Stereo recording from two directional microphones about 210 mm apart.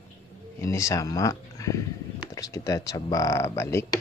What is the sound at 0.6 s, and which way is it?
Speech, 15° left (ahead or behind).